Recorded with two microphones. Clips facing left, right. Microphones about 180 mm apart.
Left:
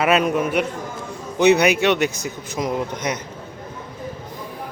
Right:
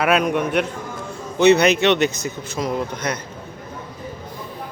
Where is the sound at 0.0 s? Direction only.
5° left (ahead or behind).